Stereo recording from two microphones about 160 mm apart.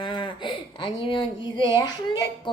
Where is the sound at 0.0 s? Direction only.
30° left (ahead or behind).